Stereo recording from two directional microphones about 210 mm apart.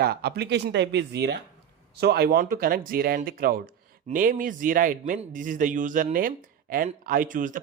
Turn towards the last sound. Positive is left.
turn(degrees=-40)  # may be behind; listen again after turning